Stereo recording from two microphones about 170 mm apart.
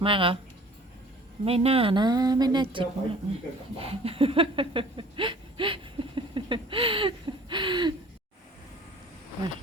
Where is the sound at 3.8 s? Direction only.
35° right (ahead or behind).